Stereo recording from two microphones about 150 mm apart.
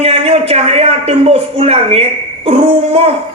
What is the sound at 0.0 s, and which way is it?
A man's voice, 45° right (ahead or behind).